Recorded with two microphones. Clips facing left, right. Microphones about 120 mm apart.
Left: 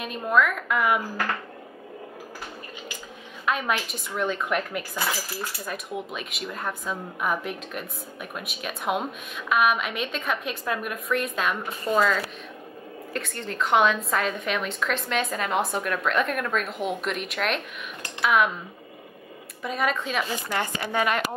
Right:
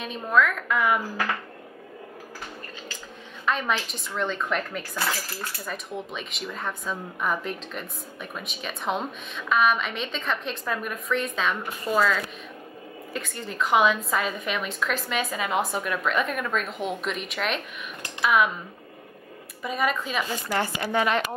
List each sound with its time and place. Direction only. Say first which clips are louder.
0.0 s speech: even; 5° left (ahead or behind)
3.4 s speech: even; 5° left (ahead or behind)
19.6 s speech: even; centre (ahead or behind)
20.4 s a woman's voice: right 2 dB; 20° left (ahead or behind)